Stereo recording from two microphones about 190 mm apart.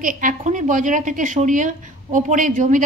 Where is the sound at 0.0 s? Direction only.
45° right (ahead or behind).